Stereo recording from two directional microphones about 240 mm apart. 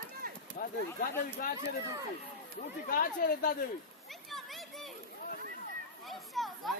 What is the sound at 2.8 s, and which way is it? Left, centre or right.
Speech, left.